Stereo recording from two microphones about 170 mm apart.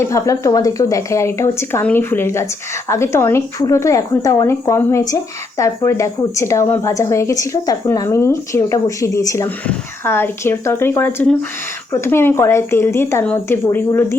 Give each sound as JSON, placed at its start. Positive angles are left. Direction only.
{"t": 0.0, "sound": "speech", "side_deg": 20}